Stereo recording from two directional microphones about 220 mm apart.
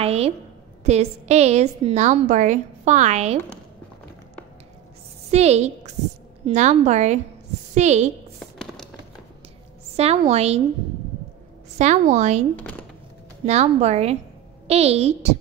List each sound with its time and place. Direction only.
0.0 s a woman's voice: 30° right (ahead or behind)
5.3 s a woman's voice: 30° right (ahead or behind)
8.4 s a sound: centre (ahead or behind)
9.9 s a woman's voice: 30° right (ahead or behind)
11.8 s a woman's voice: 30° right (ahead or behind)
13.5 s a woman's voice: 30° right (ahead or behind)